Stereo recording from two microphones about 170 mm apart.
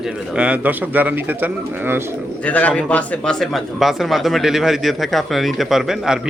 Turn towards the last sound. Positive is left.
turn(degrees=-5)  # may be behind; listen again after turning